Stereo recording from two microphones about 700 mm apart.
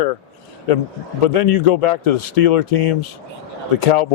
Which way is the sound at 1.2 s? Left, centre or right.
Left.